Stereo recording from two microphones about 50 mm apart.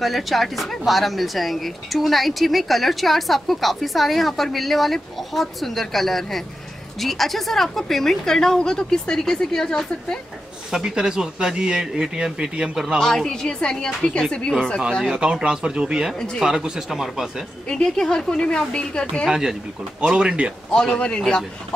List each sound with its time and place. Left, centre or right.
0.0 s a woman's voice: centre
10.7 s speech: centre
13.0 s a woman's voice: centre
15.0 s speech: centre
17.6 s a woman's voice: centre
19.2 s speech: centre
20.7 s a woman's voice: centre